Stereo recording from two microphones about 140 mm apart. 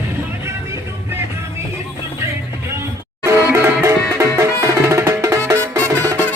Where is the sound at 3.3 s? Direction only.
20° right (ahead or behind).